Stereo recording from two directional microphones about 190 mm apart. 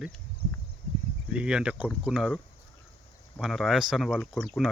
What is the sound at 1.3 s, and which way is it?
Speech, 5° right (ahead or behind).